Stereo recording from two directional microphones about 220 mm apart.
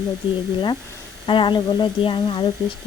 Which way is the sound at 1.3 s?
20° left (ahead or behind).